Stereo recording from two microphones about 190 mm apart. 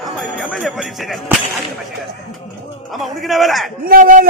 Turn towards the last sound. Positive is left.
turn(degrees=-45)  # may be behind; listen again after turning